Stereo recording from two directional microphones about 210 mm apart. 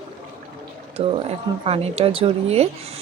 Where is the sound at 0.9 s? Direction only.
25° right (ahead or behind).